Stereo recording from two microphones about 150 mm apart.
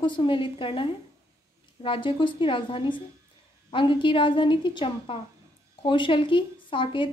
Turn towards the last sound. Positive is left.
turn(degrees=35)  # may be behind; listen again after turning